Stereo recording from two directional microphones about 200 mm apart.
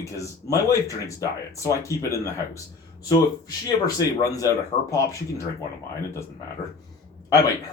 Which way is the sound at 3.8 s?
15° left (ahead or behind).